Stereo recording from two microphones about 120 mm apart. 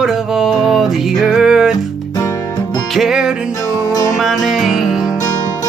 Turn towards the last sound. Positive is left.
turn(degrees=-5)  # may be behind; listen again after turning